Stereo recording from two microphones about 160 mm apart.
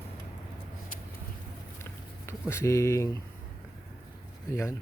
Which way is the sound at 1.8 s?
15° left (ahead or behind).